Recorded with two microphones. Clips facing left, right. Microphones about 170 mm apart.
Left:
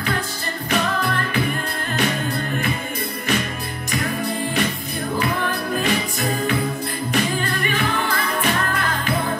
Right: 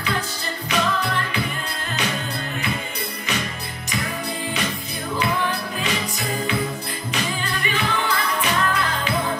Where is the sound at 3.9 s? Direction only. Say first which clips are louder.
Left 4 dB; 50° left (ahead or behind).